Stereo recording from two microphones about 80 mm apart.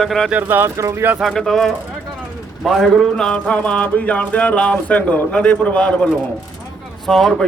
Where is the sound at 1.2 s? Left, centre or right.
Centre.